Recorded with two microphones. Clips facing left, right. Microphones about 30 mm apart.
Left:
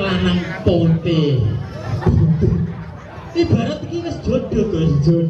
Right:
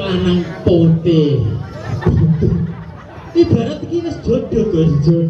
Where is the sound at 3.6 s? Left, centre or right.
Centre.